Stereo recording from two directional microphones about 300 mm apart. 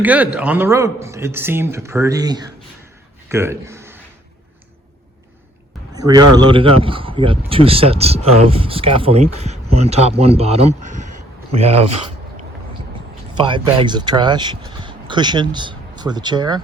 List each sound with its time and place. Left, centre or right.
0.0 s a man's voice: centre
3.2 s a sound: centre
5.9 s a man's voice: centre
13.3 s speech: centre